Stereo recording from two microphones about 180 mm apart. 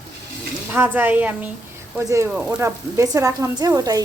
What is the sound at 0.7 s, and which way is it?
A woman's voice, 10° right (ahead or behind).